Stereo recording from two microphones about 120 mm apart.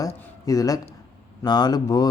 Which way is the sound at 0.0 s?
30° left (ahead or behind).